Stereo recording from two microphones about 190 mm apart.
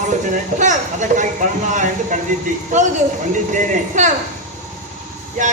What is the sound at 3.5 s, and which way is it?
Speech, 40° right (ahead or behind).